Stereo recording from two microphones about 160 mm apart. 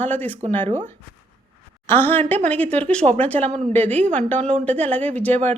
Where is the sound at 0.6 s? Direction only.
45° right (ahead or behind).